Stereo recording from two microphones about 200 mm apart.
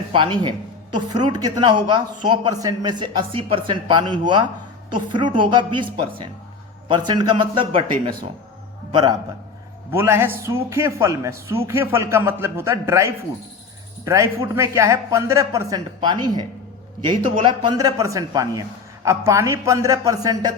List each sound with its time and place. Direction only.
0.1 s a man's voice: 25° right (ahead or behind)
8.9 s a man's voice: 20° right (ahead or behind)
9.9 s speech: 10° right (ahead or behind)